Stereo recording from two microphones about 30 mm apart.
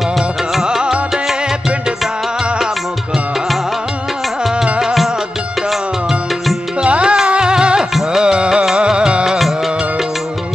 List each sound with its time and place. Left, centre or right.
6.8 s music: right